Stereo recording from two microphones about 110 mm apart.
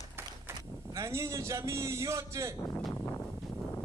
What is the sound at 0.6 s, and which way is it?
Speech, 25° right (ahead or behind).